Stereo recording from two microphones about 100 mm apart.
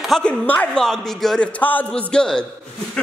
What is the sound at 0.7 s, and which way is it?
Speech, 5° left (ahead or behind).